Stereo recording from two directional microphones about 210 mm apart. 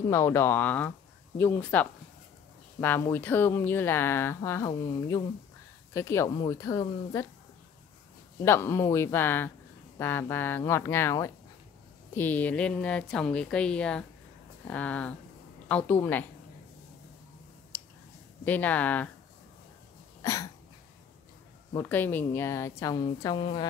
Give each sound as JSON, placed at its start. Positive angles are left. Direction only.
{"t": 0.1, "sound": "speech", "side_deg": 10}
{"t": 8.5, "sound": "a woman's voice", "side_deg": 10}
{"t": 18.4, "sound": "speech", "side_deg": 10}
{"t": 21.7, "sound": "speech", "side_deg": 10}